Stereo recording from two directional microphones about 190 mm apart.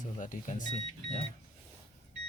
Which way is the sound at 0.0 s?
40° left (ahead or behind).